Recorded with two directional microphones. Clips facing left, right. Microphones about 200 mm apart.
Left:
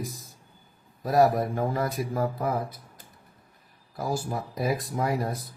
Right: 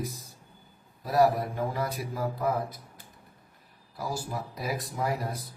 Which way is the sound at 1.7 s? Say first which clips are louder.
Left 4 dB; 50° left (ahead or behind).